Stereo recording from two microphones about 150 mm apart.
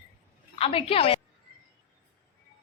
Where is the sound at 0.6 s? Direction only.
40° left (ahead or behind).